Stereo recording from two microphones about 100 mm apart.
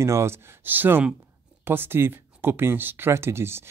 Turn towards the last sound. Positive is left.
turn(degrees=-25)  # may be behind; listen again after turning